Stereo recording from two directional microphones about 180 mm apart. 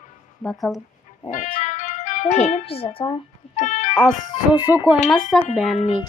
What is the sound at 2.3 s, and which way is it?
Speech, 35° left (ahead or behind).